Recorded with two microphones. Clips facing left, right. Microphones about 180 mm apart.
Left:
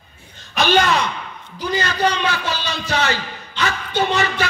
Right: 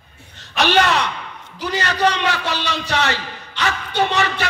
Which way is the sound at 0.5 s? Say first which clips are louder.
Even; 75° right (ahead or behind).